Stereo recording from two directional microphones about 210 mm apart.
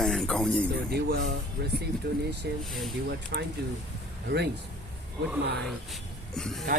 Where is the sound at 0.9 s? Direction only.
50° right (ahead or behind).